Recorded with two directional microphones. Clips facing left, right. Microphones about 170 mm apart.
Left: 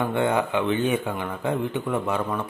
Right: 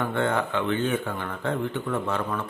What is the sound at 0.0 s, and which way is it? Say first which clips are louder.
Speech: left 3 dB; 15° left (ahead or behind).